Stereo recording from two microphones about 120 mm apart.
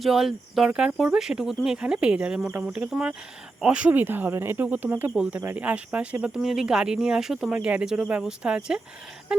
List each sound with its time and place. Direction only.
0.0 s speech: 5° right (ahead or behind)